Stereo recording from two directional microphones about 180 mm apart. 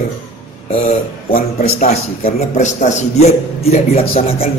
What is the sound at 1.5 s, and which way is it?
A man's voice, 40° left (ahead or behind).